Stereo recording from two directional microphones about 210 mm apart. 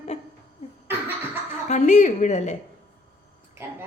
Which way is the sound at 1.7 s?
35° left (ahead or behind).